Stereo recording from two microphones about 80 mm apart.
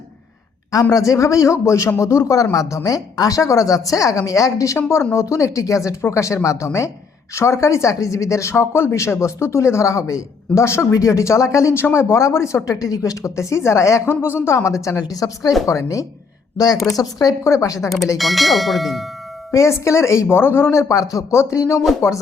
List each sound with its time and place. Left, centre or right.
0.7 s speech: left
18.2 s speech: centre
19.5 s speech: left